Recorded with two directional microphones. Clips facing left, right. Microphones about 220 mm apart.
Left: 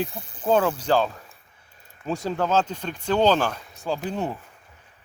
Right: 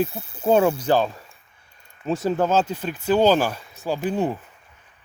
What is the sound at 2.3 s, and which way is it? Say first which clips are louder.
Speech: right 3 dB; 10° right (ahead or behind).